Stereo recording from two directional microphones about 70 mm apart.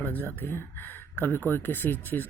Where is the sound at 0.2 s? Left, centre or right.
Left.